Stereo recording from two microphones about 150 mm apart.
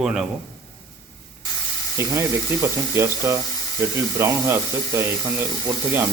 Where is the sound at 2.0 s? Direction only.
20° right (ahead or behind).